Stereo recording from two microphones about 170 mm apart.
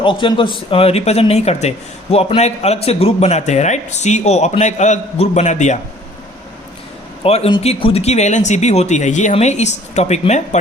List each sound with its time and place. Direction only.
0.0 s speech: 30° left (ahead or behind); by 5.8 s 45° left (ahead or behind)
7.3 s speech: 35° left (ahead or behind)